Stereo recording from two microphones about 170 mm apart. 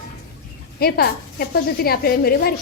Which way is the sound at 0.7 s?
65° left (ahead or behind).